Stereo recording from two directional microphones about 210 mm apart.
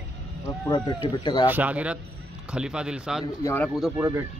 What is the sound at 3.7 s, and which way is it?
Speech, centre (ahead or behind).